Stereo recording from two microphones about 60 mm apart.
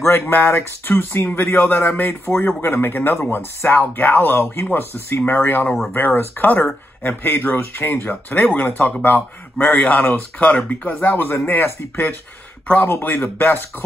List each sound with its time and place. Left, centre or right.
0.0 s speech: left